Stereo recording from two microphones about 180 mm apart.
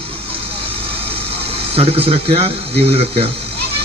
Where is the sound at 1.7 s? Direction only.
35° right (ahead or behind).